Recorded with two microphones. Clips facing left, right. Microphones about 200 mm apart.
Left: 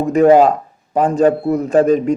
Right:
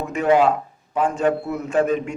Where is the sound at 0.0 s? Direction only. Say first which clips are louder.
Left 7 dB; 35° left (ahead or behind).